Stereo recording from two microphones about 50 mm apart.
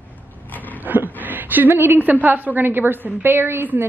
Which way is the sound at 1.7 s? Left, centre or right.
Right.